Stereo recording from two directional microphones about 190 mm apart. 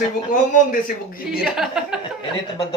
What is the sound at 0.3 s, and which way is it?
Speech, 45° left (ahead or behind).